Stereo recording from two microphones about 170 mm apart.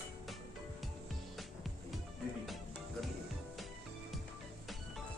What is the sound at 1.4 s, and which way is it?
Music, centre (ahead or behind).